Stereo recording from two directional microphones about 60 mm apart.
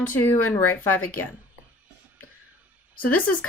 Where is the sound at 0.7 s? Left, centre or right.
Left.